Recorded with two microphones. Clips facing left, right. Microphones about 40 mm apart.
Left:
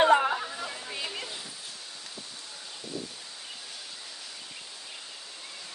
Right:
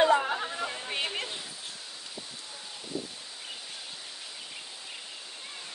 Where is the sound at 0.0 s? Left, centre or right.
Left.